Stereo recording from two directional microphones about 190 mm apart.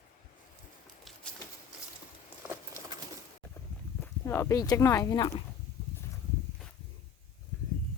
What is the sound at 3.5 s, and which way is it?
Horse, 10° left (ahead or behind).